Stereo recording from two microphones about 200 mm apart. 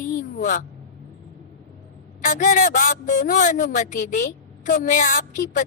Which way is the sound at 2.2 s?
40° left (ahead or behind).